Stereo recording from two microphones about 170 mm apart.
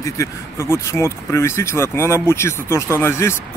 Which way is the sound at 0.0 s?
15° left (ahead or behind).